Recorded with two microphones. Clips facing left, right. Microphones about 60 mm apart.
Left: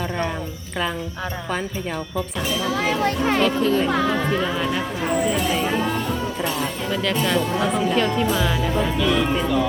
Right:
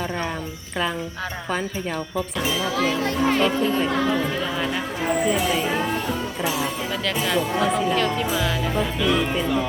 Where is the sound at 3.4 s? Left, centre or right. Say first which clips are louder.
Left 2 dB; centre.